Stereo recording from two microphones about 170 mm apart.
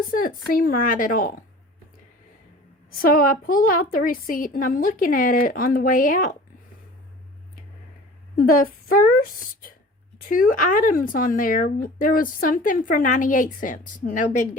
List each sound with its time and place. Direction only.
0.1 s a sound: 55° left (ahead or behind)
0.5 s a woman's voice: 55° left (ahead or behind)
3.0 s a woman's voice: 55° left (ahead or behind)
8.4 s a woman's voice: 55° left (ahead or behind)